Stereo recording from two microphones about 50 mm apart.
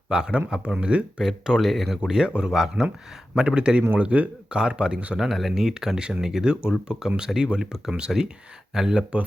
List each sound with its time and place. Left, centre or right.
0.1 s speech: centre
1.2 s speech: centre
2.0 s speech: centre
2.5 s speech: centre
3.3 s speech: centre
3.9 s speech: right
5.1 s speech: centre